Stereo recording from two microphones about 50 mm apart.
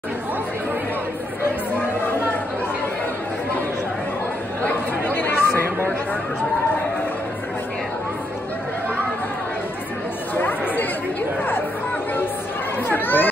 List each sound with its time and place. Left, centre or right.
5.0 s chatter: left
10.3 s chatter: left
12.8 s chatter: left